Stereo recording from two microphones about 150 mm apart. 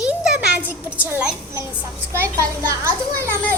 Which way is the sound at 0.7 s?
10° right (ahead or behind).